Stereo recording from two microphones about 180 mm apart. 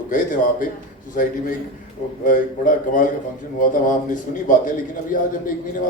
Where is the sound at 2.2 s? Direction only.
50° left (ahead or behind).